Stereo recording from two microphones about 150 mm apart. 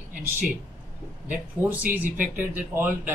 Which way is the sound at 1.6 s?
15° right (ahead or behind).